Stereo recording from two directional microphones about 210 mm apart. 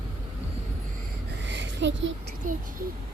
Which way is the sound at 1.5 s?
55° right (ahead or behind).